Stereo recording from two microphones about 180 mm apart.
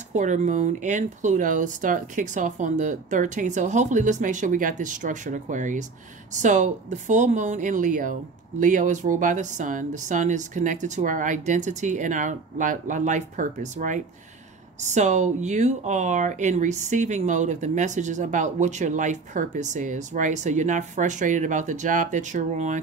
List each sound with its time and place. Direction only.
0.1 s speech: 45° right (ahead or behind)